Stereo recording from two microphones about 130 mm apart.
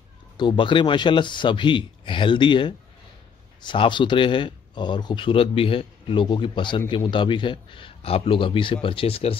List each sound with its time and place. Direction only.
0.4 s speech: 40° left (ahead or behind)